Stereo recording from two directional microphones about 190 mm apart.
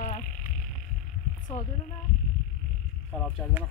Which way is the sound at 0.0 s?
40° left (ahead or behind).